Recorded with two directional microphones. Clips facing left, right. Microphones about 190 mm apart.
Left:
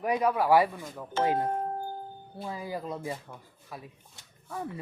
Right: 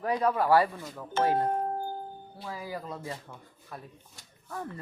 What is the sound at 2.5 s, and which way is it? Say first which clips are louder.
Speech: left 2 dB; 25° left (ahead or behind).